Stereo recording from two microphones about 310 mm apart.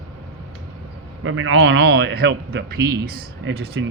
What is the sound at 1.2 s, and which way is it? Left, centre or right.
A man's voice, right.